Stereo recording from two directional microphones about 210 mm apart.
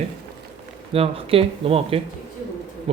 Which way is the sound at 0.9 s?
25° right (ahead or behind).